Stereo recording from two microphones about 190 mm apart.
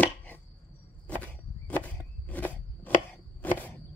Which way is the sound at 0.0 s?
10° left (ahead or behind).